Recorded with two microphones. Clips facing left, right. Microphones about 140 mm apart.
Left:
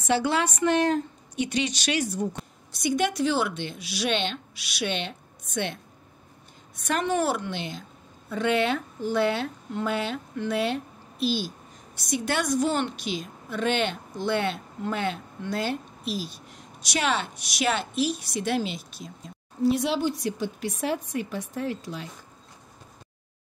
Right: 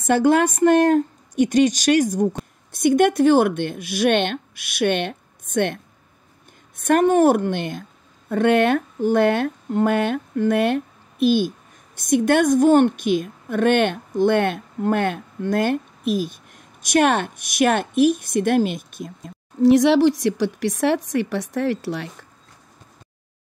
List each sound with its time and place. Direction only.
0.0 s speech: 50° right (ahead or behind)
6.8 s speech: 50° right (ahead or behind)
19.6 s a woman's voice: 85° right